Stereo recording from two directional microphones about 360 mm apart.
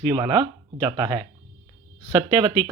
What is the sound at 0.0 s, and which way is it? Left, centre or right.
Speech, centre.